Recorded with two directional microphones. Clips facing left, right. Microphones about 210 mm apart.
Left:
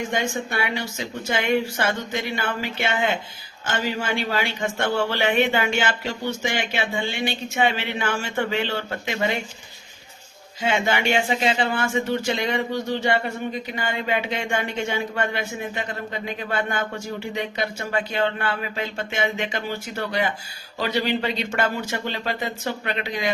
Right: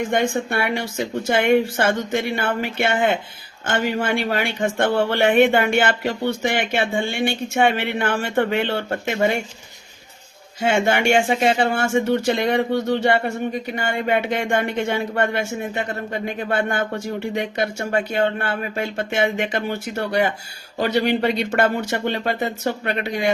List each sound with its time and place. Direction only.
0.1 s speech: 55° right (ahead or behind)
10.6 s speech: 50° right (ahead or behind)
20.7 s speech: 50° right (ahead or behind)